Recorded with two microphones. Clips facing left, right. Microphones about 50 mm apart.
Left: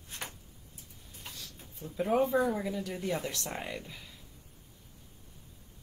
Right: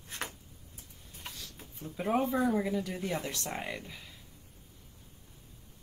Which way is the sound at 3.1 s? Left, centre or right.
Right.